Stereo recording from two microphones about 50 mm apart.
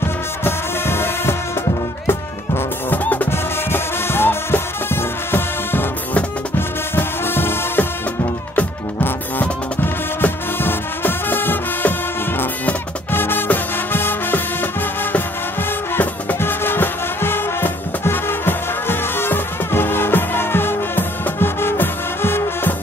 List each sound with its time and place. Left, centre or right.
0.4 s music: left
7.0 s music: left
9.0 s music: left
13.1 s music: left
16.3 s music: left